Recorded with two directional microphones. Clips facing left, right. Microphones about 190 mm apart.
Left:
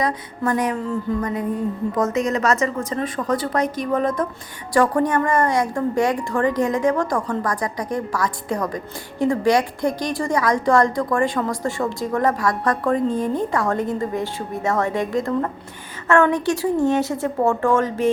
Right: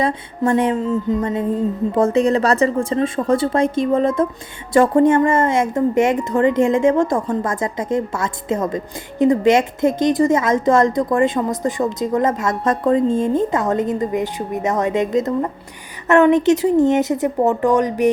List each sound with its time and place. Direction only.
0.0 s a woman's voice: 25° right (ahead or behind)